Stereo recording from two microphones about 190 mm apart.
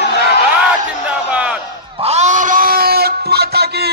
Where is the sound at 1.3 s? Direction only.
5° right (ahead or behind).